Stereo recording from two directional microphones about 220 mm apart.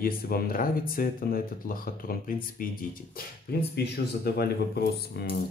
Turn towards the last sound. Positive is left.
turn(degrees=45)  # may be behind; listen again after turning